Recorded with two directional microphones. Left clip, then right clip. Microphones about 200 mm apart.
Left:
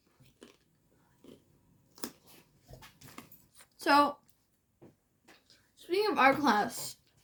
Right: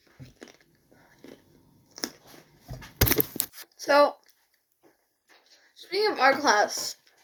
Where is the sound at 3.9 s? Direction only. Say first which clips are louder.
Right 5 dB; 35° left (ahead or behind).